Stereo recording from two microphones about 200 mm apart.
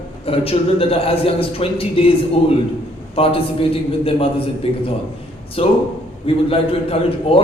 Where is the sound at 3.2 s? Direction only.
30° left (ahead or behind).